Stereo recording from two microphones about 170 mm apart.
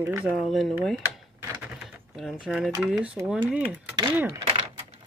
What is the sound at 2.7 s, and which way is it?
Speech, 5° right (ahead or behind).